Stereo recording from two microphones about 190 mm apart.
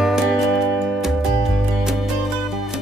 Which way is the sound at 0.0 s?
Centre (ahead or behind).